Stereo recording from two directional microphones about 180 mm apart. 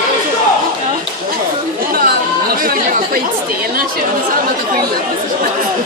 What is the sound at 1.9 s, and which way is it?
Chatter, 55° right (ahead or behind).